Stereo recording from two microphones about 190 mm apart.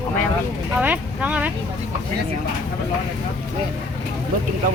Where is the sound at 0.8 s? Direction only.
5° right (ahead or behind).